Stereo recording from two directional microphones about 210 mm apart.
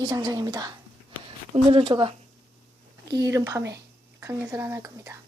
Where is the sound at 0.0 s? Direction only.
15° right (ahead or behind).